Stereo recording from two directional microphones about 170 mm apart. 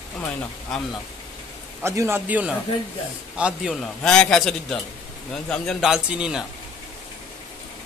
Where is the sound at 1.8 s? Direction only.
15° right (ahead or behind).